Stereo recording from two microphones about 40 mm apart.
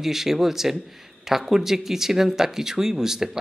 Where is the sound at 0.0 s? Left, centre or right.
Centre.